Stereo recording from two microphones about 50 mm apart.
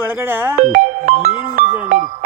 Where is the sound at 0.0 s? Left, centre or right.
Right.